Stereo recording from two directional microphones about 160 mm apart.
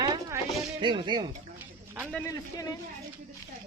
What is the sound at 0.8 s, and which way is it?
Speech, 30° right (ahead or behind).